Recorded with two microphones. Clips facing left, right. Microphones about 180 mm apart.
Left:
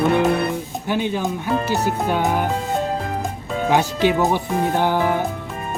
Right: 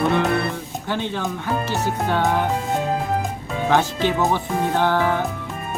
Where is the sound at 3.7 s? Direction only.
15° left (ahead or behind).